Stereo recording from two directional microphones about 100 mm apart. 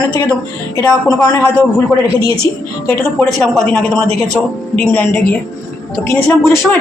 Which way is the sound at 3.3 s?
5° left (ahead or behind).